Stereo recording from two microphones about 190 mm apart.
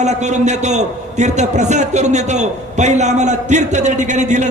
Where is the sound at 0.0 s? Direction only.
35° right (ahead or behind).